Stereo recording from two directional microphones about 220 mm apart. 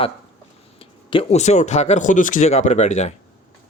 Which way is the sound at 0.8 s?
25° left (ahead or behind).